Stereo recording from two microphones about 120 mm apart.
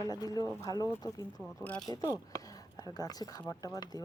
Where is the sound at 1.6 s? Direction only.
10° left (ahead or behind).